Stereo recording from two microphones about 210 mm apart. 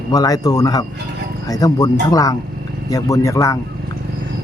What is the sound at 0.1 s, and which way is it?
Speech, 15° left (ahead or behind).